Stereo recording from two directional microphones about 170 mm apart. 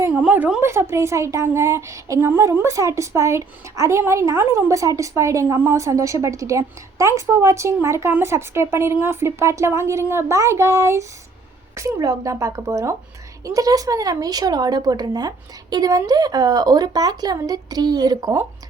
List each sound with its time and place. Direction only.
0.0 s a woman's voice: 10° right (ahead or behind)